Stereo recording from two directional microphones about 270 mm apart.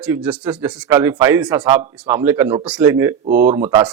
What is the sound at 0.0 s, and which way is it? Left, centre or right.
Speech, centre.